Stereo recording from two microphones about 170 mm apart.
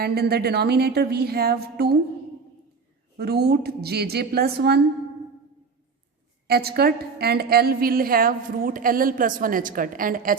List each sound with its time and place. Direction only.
0.0 s a woman's voice: 65° right (ahead or behind)
3.2 s a woman's voice: 70° right (ahead or behind)
6.5 s a woman's voice: 65° right (ahead or behind)